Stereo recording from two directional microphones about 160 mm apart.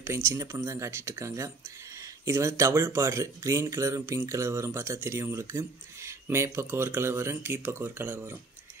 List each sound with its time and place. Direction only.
0.0 s speech: 15° right (ahead or behind)